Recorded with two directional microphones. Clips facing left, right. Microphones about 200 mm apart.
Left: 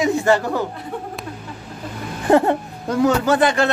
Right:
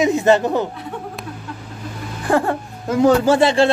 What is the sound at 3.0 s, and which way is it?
Speech, 30° right (ahead or behind).